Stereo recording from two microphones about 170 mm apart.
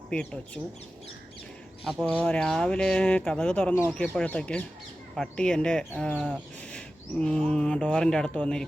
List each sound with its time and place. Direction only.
0.1 s speech: 5° left (ahead or behind)
1.8 s speech: centre (ahead or behind)